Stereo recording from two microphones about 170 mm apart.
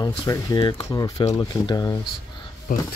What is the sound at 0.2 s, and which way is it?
Speech, 20° left (ahead or behind).